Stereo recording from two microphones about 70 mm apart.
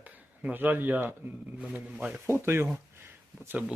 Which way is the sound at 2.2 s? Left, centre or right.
Right.